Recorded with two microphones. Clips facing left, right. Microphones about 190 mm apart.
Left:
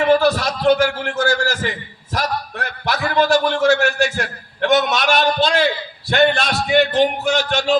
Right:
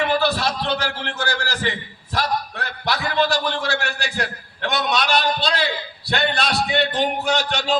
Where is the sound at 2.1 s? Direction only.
45° left (ahead or behind).